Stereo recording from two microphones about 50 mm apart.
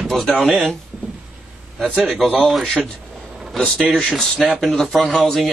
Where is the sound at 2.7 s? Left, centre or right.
Centre.